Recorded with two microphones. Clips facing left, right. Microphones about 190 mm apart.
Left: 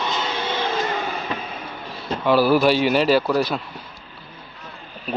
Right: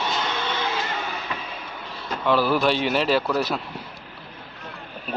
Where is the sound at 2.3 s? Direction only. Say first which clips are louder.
Left 4 dB; 5° left (ahead or behind).